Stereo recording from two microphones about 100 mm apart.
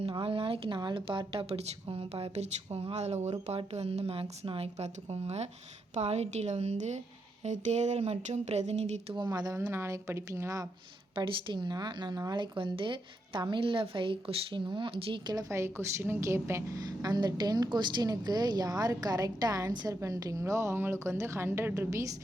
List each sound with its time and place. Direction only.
0.1 s speech: 60° right (ahead or behind)
0.8 s a woman's voice: 55° right (ahead or behind); by 9.1 s 90° right
9.1 s speech: 45° right (ahead or behind)
9.6 s a woman's voice: 25° right (ahead or behind)
11.1 s speech: 55° right (ahead or behind)
12.5 s speech: 60° right (ahead or behind)
15.4 s a woman's voice: 25° right (ahead or behind)